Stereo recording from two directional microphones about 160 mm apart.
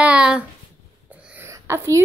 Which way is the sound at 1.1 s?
10° right (ahead or behind).